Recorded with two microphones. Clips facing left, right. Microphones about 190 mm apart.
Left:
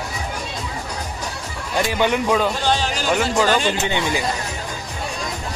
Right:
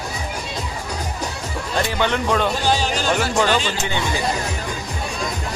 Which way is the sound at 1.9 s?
10° left (ahead or behind).